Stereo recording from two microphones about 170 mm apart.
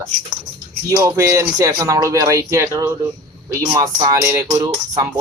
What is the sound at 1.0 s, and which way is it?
Speech, 15° right (ahead or behind).